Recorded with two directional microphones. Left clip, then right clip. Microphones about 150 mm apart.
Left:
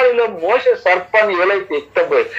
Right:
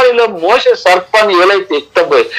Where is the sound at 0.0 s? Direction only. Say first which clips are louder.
Right 5 dB; 40° right (ahead or behind).